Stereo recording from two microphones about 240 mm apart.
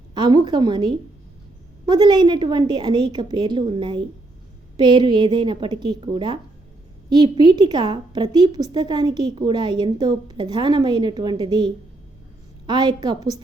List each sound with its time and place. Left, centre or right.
0.1 s a woman's voice: centre